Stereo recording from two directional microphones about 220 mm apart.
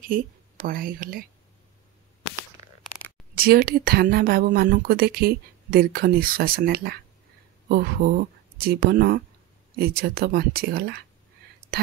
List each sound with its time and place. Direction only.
0.7 s speech: 40° right (ahead or behind)
3.3 s speech: 45° right (ahead or behind)